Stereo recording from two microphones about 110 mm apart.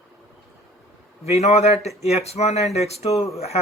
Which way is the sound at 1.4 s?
80° left.